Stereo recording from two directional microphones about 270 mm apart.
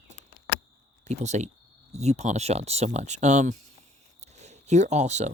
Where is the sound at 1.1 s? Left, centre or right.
Right.